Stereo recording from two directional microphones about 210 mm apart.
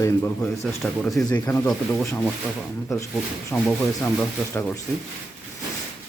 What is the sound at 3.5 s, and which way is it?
Speech, 10° left (ahead or behind).